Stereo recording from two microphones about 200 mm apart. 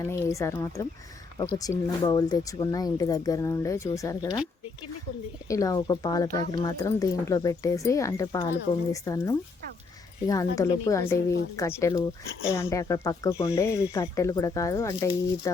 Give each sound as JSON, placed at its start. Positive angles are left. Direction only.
{"t": 0.0, "sound": "speech", "side_deg": 15}
{"t": 5.5, "sound": "speech", "side_deg": 15}